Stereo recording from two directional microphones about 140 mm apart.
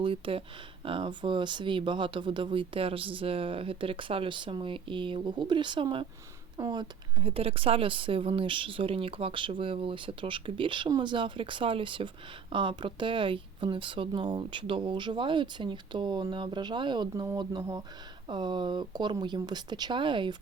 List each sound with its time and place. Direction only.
0.0 s speech: 40° right (ahead or behind)
7.2 s speech: 45° right (ahead or behind)